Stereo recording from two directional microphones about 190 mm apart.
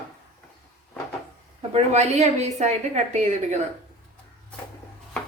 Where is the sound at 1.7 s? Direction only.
35° right (ahead or behind).